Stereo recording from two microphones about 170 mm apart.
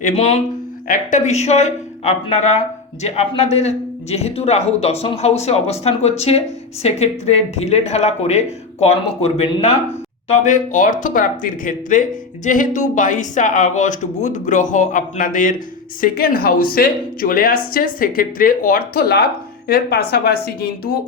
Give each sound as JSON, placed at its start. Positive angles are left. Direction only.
{"t": 0.0, "sound": "a woman's voice", "side_deg": 40}